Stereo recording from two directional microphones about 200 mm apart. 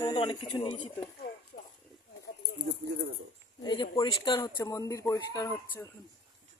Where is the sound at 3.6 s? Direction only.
20° left (ahead or behind).